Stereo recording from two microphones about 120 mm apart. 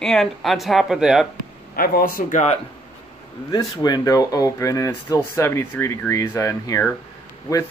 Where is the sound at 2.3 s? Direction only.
75° left (ahead or behind).